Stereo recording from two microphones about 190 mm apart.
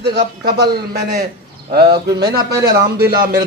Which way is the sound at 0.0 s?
55° right (ahead or behind).